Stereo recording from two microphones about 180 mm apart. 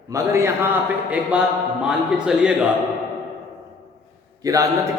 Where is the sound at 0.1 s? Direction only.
15° right (ahead or behind).